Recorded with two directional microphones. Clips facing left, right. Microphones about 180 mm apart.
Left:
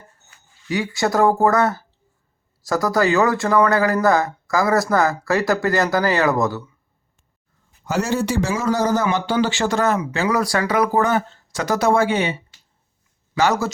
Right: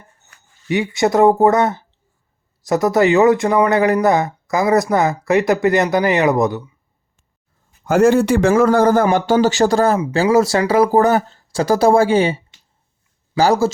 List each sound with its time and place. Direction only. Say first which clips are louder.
0.7 s speech: right 4 dB; 20° right (ahead or behind)
7.9 s a man's voice: right 9 dB; 55° right (ahead or behind); by 13.7 s 30° right (ahead or behind)